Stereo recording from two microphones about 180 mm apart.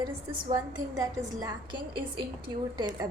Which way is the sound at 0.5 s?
20° right (ahead or behind).